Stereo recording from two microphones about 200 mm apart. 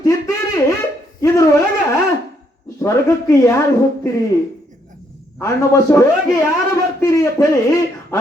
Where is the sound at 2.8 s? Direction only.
15° left (ahead or behind).